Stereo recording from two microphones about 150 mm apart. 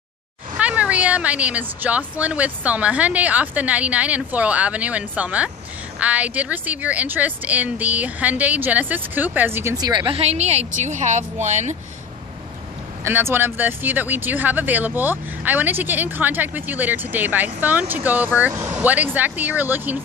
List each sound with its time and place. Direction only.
0.6 s speech: 10° right (ahead or behind)
9.8 s a woman's voice: 30° right (ahead or behind); by 11.7 s 50° right (ahead or behind)
13.0 s speech: 15° right (ahead or behind)